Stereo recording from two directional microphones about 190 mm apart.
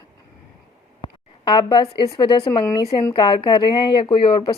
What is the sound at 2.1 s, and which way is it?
Speech, 25° left (ahead or behind).